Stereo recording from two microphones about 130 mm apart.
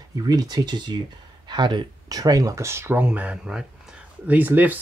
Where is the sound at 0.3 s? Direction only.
30° right (ahead or behind).